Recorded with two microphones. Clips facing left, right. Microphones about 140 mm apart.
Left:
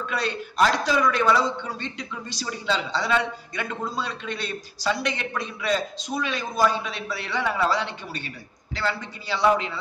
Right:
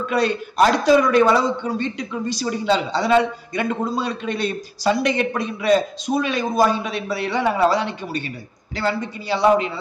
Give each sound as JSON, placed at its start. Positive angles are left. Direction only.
{"t": 0.1, "sound": "a man's voice", "side_deg": -50}